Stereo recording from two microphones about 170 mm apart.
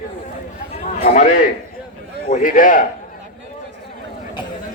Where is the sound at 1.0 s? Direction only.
45° left (ahead or behind).